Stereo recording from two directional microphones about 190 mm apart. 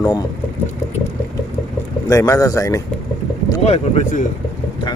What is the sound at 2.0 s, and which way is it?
Speech, 20° left (ahead or behind).